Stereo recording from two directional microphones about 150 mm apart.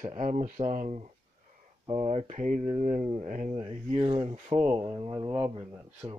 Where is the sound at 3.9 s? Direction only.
40° right (ahead or behind).